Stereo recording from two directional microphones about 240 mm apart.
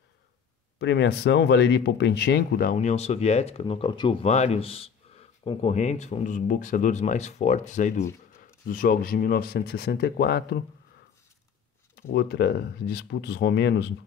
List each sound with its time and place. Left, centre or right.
0.7 s speech: left
11.9 s speech: left